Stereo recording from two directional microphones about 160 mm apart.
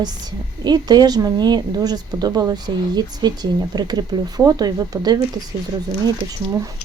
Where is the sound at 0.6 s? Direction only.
25° right (ahead or behind).